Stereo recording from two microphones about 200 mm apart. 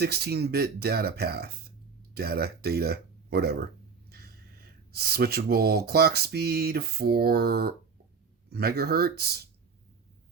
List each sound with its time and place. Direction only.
0.0 s speech: 55° right (ahead or behind)